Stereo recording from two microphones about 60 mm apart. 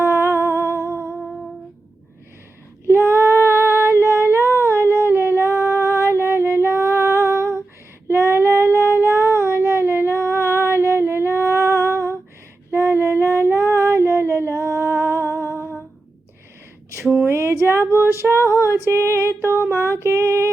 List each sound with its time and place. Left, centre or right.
0.1 s humming: right
1.0 s music: centre
2.8 s female singing: right
9.0 s child singing: right
12.7 s female singing: right
14.8 s humming: right
17.2 s female singing: right
19.5 s a sound: right
20.0 s female singing: right